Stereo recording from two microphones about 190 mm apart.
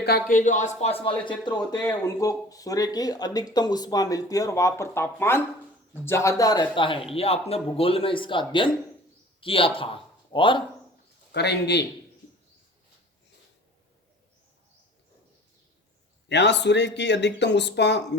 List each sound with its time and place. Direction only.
0.0 s a man's voice: 50° left (ahead or behind); by 10.6 s 25° left (ahead or behind)
11.3 s speech: 60° left (ahead or behind)
16.3 s speech: 65° left (ahead or behind)